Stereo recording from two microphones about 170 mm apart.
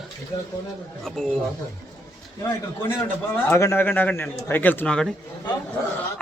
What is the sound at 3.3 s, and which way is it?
Speech, 15° left (ahead or behind).